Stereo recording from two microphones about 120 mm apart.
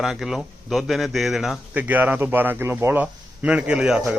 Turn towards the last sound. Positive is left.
turn(degrees=-5)  # may be behind; listen again after turning